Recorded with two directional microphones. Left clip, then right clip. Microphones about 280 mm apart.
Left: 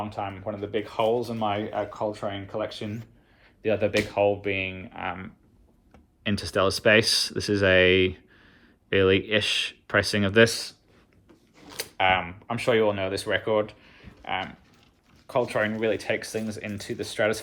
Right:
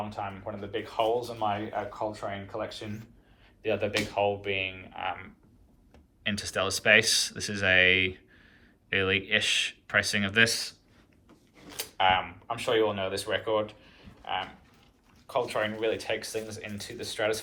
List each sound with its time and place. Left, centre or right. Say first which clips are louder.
0.0 s speech: left 4 dB; left; by 10.8 s centre
11.8 s speech: left 2 dB; left